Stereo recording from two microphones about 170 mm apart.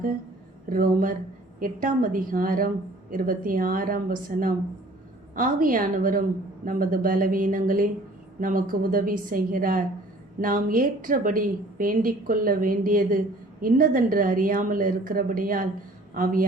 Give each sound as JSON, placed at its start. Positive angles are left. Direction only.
{"t": 0.7, "sound": "a woman's voice", "side_deg": -55}